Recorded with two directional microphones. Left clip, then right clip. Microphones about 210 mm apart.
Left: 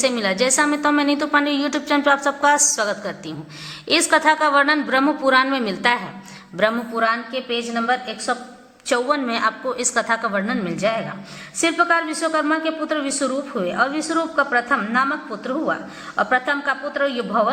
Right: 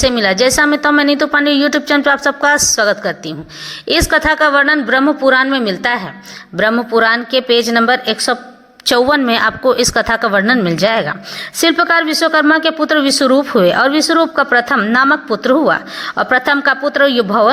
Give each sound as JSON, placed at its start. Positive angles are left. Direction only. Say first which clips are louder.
{"t": 0.0, "sound": "a woman's voice", "louder": "right 8 dB", "side_deg": -25}